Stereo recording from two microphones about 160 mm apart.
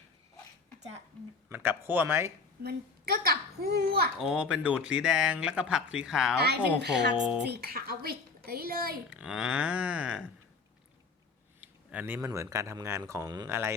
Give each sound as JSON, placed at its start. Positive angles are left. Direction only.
{"t": 1.5, "sound": "speech", "side_deg": -15}
{"t": 2.6, "sound": "speech", "side_deg": -75}
{"t": 4.2, "sound": "speech", "side_deg": -5}
{"t": 6.7, "sound": "speech", "side_deg": -90}
{"t": 9.0, "sound": "speech", "side_deg": -5}
{"t": 11.6, "sound": "speech", "side_deg": -10}